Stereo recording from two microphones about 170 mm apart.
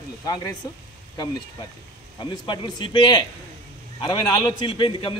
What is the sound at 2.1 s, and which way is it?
A man's voice, 25° left (ahead or behind).